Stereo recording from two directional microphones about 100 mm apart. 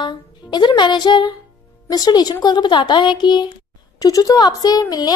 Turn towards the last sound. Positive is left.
turn(degrees=40)  # may be behind; listen again after turning